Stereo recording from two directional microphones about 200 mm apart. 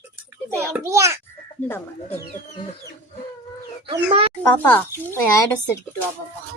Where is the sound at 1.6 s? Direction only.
10° left (ahead or behind).